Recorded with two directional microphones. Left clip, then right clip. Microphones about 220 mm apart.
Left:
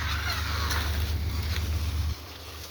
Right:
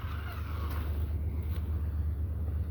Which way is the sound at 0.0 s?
30° right (ahead or behind).